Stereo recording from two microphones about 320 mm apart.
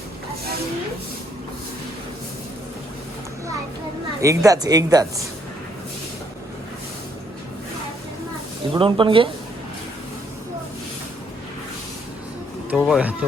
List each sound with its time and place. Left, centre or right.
4.2 s speech: centre
8.7 s speech: centre
12.7 s speech: centre